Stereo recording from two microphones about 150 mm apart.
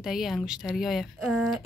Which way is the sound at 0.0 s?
Centre (ahead or behind).